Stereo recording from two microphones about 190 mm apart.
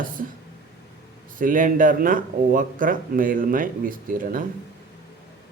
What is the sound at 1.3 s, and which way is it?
Speech, 45° right (ahead or behind).